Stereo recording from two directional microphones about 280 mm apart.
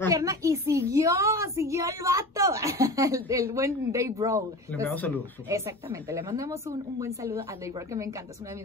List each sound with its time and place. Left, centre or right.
0.1 s a child's voice: centre
4.8 s speech: centre
5.5 s a child's voice: centre